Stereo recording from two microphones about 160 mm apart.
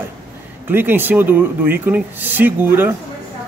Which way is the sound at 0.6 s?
10° right (ahead or behind).